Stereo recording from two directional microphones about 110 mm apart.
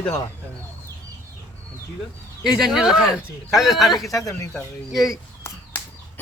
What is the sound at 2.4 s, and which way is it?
Speech, 5° right (ahead or behind).